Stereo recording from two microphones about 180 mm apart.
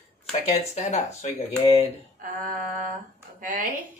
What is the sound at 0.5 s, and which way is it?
Speech, 40° left (ahead or behind).